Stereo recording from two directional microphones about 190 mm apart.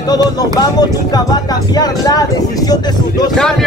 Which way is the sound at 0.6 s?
20° left (ahead or behind).